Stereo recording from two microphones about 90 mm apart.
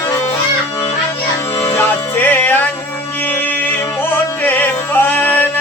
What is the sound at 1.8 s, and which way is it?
Music, 20° left (ahead or behind).